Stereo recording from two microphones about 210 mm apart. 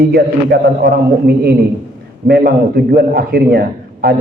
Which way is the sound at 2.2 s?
50° right (ahead or behind).